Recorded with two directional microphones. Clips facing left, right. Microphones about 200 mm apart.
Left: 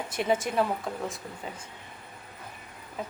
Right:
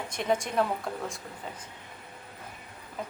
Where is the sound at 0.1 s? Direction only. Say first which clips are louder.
Left 2 dB; 5° left (ahead or behind).